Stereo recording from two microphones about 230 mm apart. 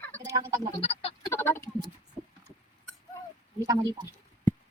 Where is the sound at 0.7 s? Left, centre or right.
Left.